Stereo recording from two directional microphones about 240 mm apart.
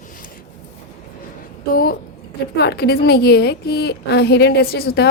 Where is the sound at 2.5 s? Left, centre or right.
Left.